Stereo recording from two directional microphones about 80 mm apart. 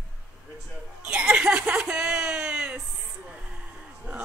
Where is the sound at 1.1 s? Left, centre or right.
Centre.